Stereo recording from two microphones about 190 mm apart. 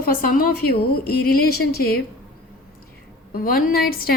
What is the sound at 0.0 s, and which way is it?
A woman's voice, 50° left (ahead or behind).